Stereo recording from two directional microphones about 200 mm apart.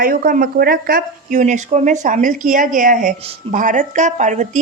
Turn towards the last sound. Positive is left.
turn(degrees=-35)  # may be behind; listen again after turning